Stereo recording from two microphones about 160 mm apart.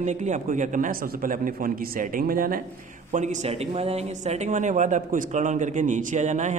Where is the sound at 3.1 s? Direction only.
45° right (ahead or behind).